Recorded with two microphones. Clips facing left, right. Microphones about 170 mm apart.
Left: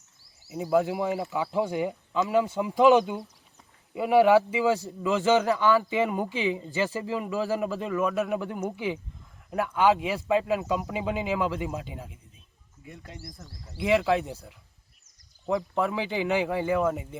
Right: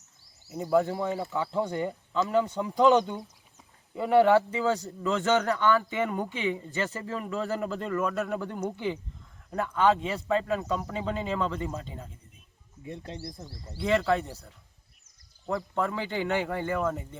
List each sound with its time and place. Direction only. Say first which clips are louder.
0.5 s speech: left 1 dB; 5° left (ahead or behind)
0.9 s speech: left 2 dB; 15° left (ahead or behind)
12.8 s speech: right 5 dB; 25° right (ahead or behind)
13.7 s speech: left 2 dB; 15° left (ahead or behind)
15.5 s speech: left 3 dB; 15° left (ahead or behind)